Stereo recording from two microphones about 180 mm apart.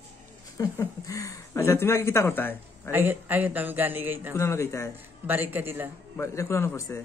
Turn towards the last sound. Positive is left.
turn(degrees=15)  # may be behind; listen again after turning